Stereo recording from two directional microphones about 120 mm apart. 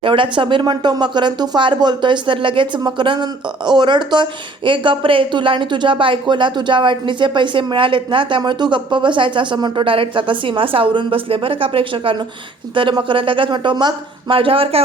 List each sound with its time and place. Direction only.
0.0 s speech: 45° right (ahead or behind)